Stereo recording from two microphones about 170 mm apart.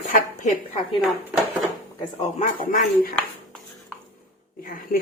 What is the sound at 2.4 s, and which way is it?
Speech, 50° left (ahead or behind).